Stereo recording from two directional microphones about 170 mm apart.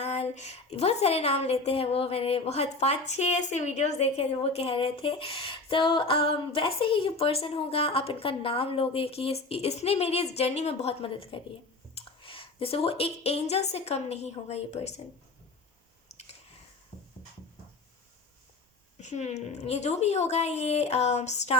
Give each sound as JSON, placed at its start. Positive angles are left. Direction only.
{"t": 0.0, "sound": "a woman's voice", "side_deg": 40}
{"t": 18.9, "sound": "a woman's voice", "side_deg": 40}